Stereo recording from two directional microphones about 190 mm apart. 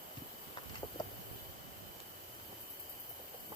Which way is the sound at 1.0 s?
20° left (ahead or behind).